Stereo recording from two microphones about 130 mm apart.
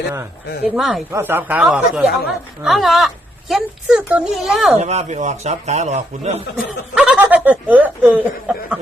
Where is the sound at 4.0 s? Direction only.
15° right (ahead or behind).